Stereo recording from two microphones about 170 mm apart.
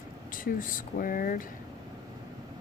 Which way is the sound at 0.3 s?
55° left (ahead or behind).